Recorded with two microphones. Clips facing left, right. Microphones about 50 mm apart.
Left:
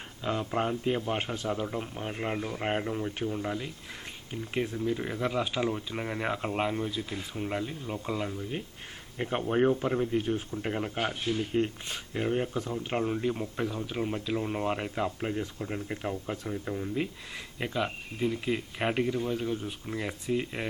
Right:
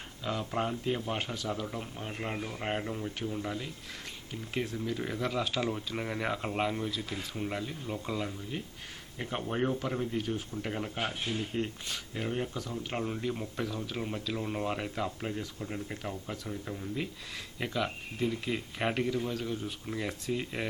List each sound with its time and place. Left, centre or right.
0.2 s speech: centre
1.2 s speech: left; by 20.7 s centre